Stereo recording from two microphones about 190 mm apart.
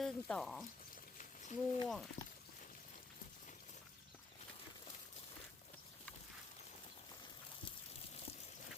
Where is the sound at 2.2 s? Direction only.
40° left (ahead or behind).